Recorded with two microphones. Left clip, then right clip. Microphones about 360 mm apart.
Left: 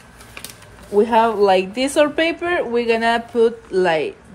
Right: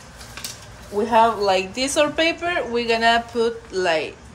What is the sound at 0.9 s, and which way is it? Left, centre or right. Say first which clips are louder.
Speech: left 2 dB; left.